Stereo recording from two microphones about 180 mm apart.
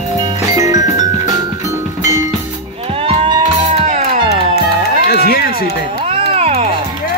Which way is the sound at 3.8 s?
45° right (ahead or behind).